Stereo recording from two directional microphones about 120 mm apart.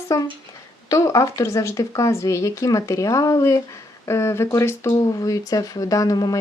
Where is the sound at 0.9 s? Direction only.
30° left (ahead or behind).